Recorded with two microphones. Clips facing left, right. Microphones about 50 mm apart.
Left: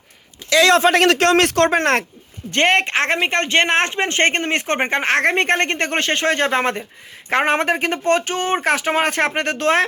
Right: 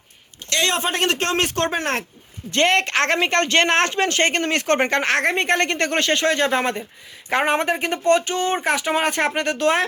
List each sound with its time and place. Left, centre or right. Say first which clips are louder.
0.6 s speech: left 8 dB; left
2.5 s speech: left 2 dB; left
2.8 s speech: left 1 dB; centre
4.2 s speech: left 4 dB; left
4.4 s speech: right 1 dB; left
5.1 s speech: left 3 dB; left
5.5 s speech: left 1 dB; left
8.6 s speech: left 2 dB; left